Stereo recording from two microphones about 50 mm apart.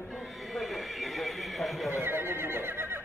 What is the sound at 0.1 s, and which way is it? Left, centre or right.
Neigh, centre.